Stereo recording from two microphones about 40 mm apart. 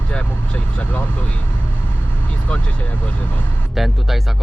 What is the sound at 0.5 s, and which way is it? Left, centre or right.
Speech, left.